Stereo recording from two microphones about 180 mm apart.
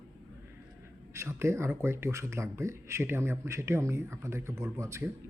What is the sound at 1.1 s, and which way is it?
Speech, 15° right (ahead or behind).